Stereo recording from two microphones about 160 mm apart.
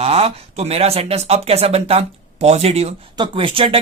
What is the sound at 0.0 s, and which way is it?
Speech, 40° right (ahead or behind).